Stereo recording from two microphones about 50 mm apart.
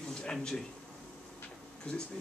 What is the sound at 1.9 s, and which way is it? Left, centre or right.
Speech, left.